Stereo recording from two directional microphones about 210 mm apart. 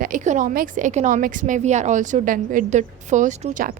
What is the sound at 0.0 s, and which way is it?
A woman's voice, 40° right (ahead or behind).